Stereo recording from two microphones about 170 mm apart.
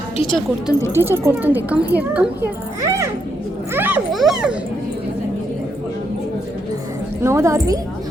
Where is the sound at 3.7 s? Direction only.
10° right (ahead or behind).